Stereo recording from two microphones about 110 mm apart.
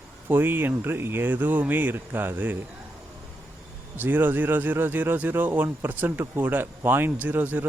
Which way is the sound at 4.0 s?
15° right (ahead or behind).